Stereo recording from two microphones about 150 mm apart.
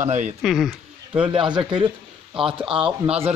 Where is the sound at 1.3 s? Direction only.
35° right (ahead or behind).